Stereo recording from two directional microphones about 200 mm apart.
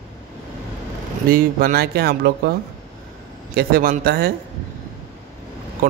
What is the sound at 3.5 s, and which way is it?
Speech, 45° right (ahead or behind).